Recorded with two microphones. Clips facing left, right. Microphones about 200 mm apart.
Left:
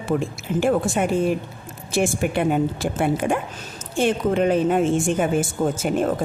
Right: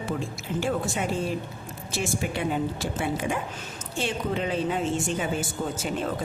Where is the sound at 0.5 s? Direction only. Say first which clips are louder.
Left 8 dB; 55° left (ahead or behind).